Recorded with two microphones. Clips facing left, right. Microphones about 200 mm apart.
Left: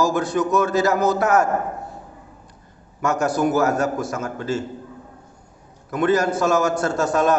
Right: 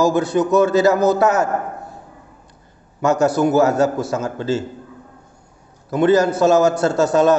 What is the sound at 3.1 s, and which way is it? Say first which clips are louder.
Speech: right 5 dB; 75° right (ahead or behind).